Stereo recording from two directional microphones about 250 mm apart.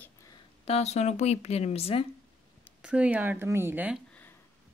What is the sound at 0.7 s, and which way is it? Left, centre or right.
Speech, left.